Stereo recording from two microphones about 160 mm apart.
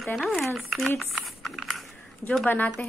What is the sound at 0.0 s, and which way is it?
Speech, centre (ahead or behind).